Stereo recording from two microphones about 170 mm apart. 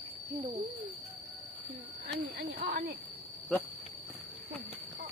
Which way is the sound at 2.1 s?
85° right.